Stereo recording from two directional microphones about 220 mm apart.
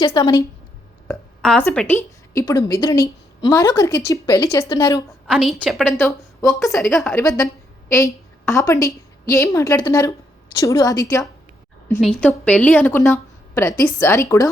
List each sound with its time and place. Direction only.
0.0 s a woman's voice: 20° left (ahead or behind)
1.0 s a woman's voice: 5° left (ahead or behind)
5.3 s a woman's voice: centre (ahead or behind)
11.9 s a woman's voice: centre (ahead or behind)